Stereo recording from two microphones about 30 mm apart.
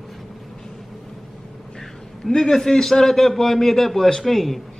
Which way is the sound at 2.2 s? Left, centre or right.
Left.